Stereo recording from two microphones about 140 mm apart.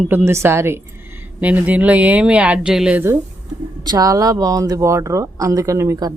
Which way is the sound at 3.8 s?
30° right (ahead or behind).